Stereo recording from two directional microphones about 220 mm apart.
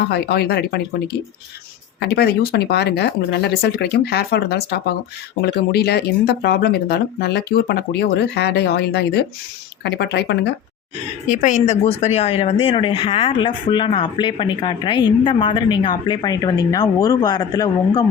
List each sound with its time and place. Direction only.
0.1 s speech: 45° left (ahead or behind)
11.3 s speech: 35° left (ahead or behind); by 18.0 s 20° left (ahead or behind)